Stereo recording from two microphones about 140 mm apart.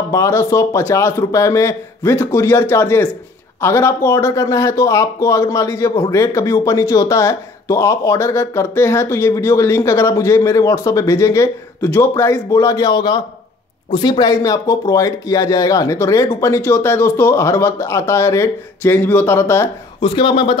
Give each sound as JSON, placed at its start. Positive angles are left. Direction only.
{"t": 0.1, "sound": "speech", "side_deg": 20}
{"t": 20.0, "sound": "a man's voice", "side_deg": 35}